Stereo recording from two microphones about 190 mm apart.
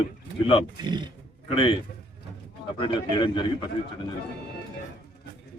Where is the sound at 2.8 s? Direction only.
25° left (ahead or behind).